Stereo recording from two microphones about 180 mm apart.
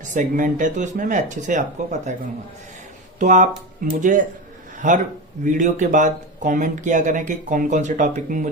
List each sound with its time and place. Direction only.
0.1 s speech: 45° right (ahead or behind)
3.2 s speech: 45° right (ahead or behind)